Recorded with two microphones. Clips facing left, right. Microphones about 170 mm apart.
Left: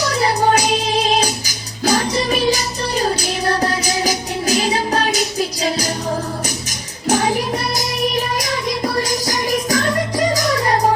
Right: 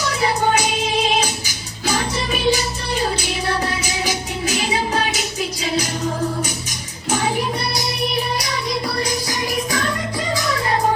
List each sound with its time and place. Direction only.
0.0 s music: 40° left (ahead or behind)
7.1 s music: 40° left (ahead or behind)